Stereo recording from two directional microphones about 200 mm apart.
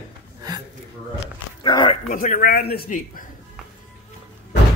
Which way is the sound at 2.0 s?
40° left (ahead or behind).